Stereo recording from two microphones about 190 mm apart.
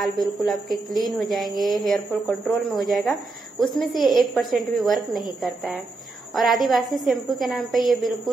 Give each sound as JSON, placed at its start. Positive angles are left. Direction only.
{"t": 0.0, "sound": "a woman's voice", "side_deg": 0}
{"t": 1.5, "sound": "a woman's voice", "side_deg": -45}
{"t": 1.9, "sound": "a woman's voice", "side_deg": 0}